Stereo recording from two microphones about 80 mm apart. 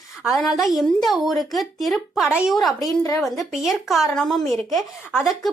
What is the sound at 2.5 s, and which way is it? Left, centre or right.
A woman's voice, centre.